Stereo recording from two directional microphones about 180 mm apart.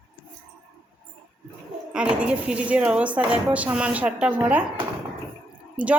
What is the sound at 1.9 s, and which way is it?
A woman's voice, 5° right (ahead or behind).